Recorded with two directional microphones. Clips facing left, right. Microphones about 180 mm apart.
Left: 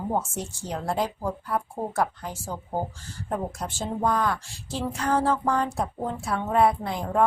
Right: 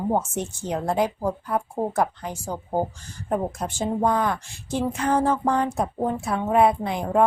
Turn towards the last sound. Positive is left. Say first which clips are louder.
# right 3 dB
turn(degrees=-20)  # may be behind; listen again after turning